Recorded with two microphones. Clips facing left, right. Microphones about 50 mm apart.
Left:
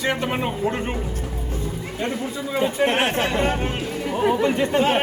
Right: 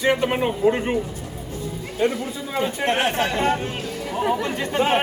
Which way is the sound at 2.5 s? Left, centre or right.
Centre.